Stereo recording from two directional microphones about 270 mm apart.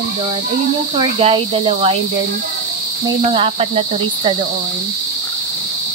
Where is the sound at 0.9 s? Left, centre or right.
Centre.